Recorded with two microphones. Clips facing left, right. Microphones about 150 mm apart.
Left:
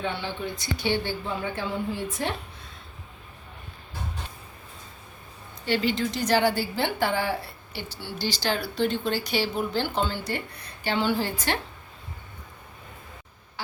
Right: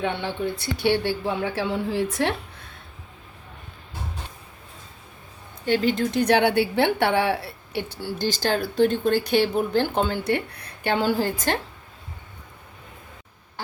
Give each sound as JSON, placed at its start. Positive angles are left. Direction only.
{"t": 0.0, "sound": "speech", "side_deg": -65}
{"t": 5.6, "sound": "a woman's voice", "side_deg": -50}
{"t": 8.0, "sound": "speech", "side_deg": -50}